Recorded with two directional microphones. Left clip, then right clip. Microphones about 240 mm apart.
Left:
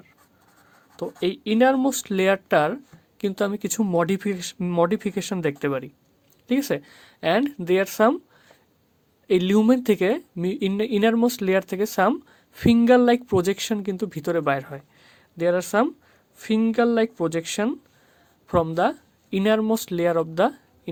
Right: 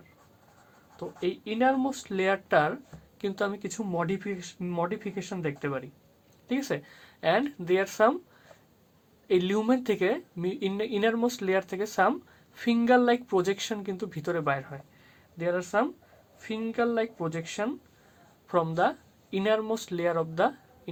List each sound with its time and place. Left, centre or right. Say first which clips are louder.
0.9 s speech: left 6 dB; left
9.2 s speech: left 6 dB; left